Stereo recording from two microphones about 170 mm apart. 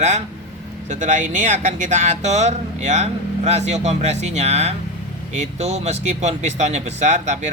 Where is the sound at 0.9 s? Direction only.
50° right (ahead or behind).